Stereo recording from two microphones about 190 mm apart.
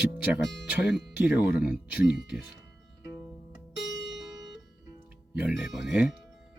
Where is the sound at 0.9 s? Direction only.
5° right (ahead or behind).